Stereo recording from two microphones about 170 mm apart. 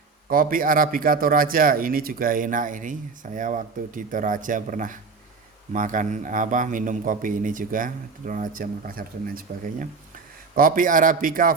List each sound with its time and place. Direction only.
0.3 s a man's voice: 55° right (ahead or behind)